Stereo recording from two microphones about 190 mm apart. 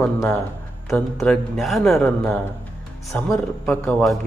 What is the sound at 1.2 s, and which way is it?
A man's voice, centre (ahead or behind).